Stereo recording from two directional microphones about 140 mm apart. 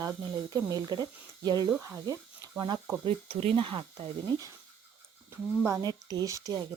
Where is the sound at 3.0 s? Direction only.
45° right (ahead or behind).